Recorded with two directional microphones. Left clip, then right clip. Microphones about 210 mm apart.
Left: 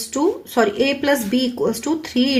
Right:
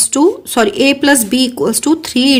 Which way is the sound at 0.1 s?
45° right (ahead or behind).